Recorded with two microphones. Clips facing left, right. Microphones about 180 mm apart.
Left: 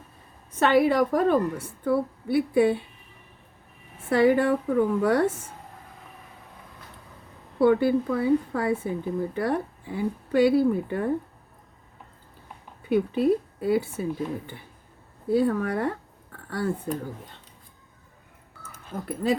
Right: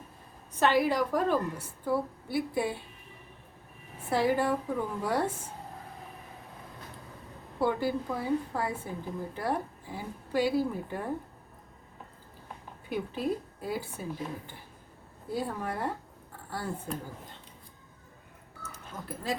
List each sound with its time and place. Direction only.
0.6 s speech: 60° left (ahead or behind)
4.1 s speech: 65° left (ahead or behind)
7.6 s a woman's voice: 65° left (ahead or behind)
12.9 s speech: 65° left (ahead or behind)
19.0 s speech: 65° left (ahead or behind)